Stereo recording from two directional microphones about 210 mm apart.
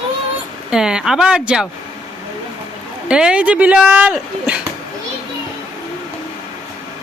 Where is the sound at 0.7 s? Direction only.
5° right (ahead or behind).